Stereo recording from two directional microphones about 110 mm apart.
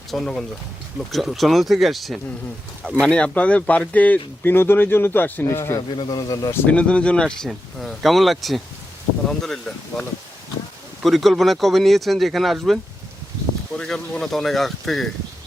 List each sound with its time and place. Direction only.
0.1 s speech: 5° left (ahead or behind); by 5.8 s 25° left (ahead or behind)
6.0 s speech: 40° left (ahead or behind)
6.5 s speech: 10° left (ahead or behind)